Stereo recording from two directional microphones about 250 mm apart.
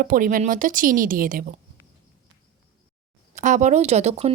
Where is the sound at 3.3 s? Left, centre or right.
Right.